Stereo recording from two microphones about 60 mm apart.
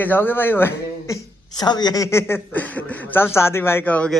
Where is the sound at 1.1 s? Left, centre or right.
Left.